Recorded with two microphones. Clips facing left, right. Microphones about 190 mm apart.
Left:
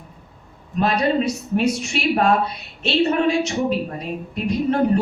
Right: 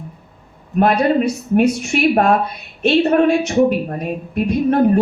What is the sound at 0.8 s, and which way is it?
A woman's voice, 55° right (ahead or behind).